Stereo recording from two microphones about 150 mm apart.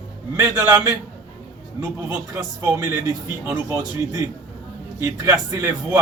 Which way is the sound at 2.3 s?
15° right (ahead or behind).